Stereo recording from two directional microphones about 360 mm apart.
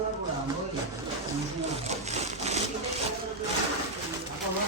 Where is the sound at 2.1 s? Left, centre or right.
Centre.